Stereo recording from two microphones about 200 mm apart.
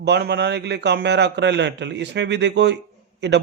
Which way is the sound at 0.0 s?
55° right (ahead or behind).